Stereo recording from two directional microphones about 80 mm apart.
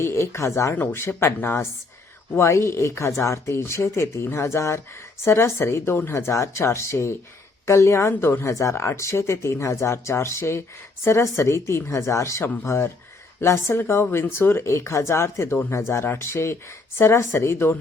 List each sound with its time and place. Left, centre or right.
0.0 s speech: left